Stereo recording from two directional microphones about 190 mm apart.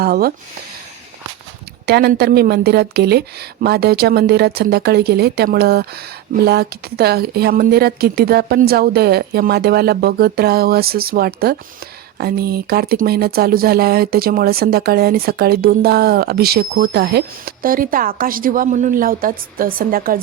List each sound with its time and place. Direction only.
0.0 s speech: 50° right (ahead or behind)
1.9 s a woman's voice: 55° right (ahead or behind)